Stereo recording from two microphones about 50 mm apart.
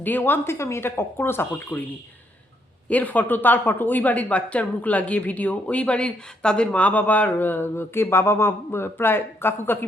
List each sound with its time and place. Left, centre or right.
0.0 s speech: left
0.4 s speech: left
2.9 s speech: left